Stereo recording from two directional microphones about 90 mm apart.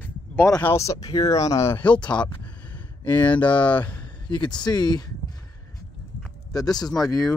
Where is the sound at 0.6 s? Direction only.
30° left (ahead or behind).